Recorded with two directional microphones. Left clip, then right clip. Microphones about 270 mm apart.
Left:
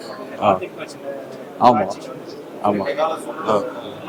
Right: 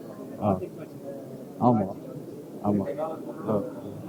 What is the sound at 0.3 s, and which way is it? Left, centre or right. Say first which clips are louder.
Speech: left 11 dB; centre.